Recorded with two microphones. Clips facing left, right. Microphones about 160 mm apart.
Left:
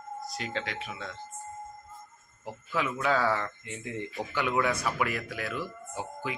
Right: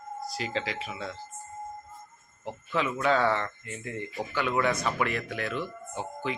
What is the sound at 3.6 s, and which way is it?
Speech, 15° left (ahead or behind).